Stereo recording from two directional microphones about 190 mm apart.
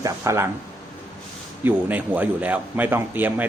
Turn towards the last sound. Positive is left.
turn(degrees=-10)  # may be behind; listen again after turning